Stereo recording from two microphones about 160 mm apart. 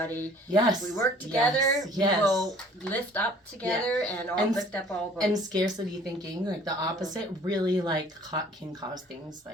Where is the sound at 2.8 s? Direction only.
10° left (ahead or behind).